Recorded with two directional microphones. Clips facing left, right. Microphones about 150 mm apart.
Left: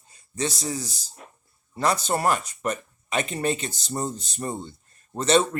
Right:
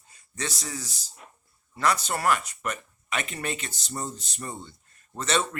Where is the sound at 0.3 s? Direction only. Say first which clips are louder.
Left 6 dB; 30° left (ahead or behind).